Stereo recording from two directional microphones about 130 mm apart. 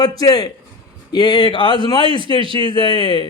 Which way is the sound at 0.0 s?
30° left (ahead or behind).